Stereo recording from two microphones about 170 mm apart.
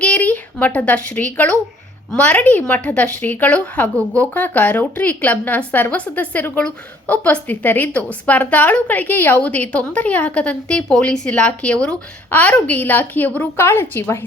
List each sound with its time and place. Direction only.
0.0 s a woman's voice: 10° left (ahead or behind)